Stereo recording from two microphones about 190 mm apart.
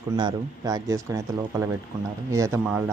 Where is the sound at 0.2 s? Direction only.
20° right (ahead or behind).